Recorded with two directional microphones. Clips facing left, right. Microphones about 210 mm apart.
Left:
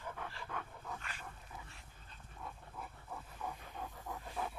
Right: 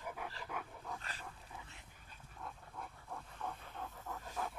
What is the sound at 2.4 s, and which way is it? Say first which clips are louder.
Dog: even; 5° left (ahead or behind).